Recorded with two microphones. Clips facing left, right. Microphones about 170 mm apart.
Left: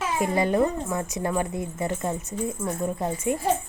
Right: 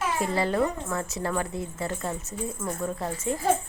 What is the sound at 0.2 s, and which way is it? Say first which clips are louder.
Speech: left 4 dB; 15° left (ahead or behind).